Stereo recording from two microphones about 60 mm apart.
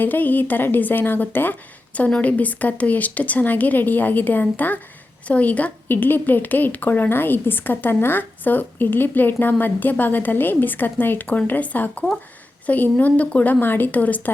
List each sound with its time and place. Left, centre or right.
0.0 s a woman's voice: left
1.9 s a woman's voice: left